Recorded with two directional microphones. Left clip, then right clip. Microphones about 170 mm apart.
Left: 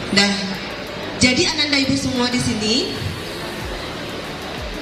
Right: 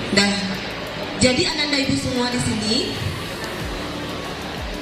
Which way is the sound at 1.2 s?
40° left (ahead or behind).